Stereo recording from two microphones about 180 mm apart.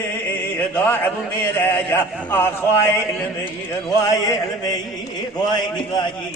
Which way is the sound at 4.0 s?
20° left (ahead or behind).